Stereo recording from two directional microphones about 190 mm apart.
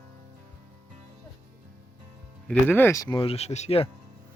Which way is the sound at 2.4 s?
5° left (ahead or behind).